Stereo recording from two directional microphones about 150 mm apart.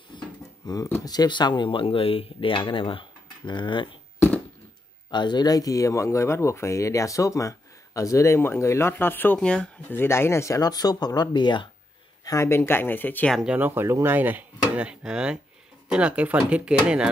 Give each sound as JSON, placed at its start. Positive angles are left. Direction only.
{"t": 0.1, "sound": "a sound", "side_deg": 30}
{"t": 1.0, "sound": "speech", "side_deg": 25}
{"t": 5.1, "sound": "speech", "side_deg": 30}
{"t": 12.3, "sound": "speech", "side_deg": 20}
{"t": 13.4, "sound": "speech", "side_deg": -10}